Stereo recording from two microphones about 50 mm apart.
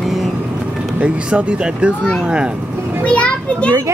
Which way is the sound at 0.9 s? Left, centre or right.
Right.